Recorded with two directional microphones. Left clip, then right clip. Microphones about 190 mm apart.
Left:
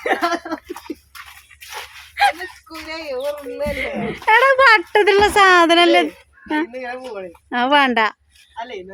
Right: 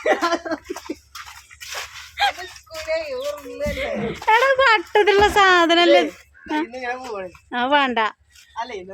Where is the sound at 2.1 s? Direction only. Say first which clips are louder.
Left 5 dB; 25° left (ahead or behind).